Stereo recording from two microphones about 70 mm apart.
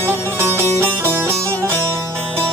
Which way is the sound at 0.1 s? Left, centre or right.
Right.